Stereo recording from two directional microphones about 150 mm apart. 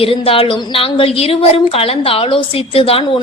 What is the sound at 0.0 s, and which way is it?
A woman's voice, 40° left (ahead or behind).